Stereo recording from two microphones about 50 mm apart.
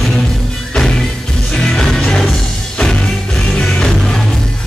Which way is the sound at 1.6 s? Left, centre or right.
Centre.